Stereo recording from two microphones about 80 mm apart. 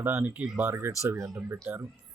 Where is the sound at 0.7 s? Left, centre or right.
Right.